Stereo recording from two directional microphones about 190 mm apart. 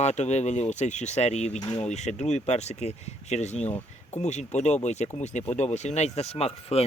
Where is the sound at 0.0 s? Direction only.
35° left (ahead or behind).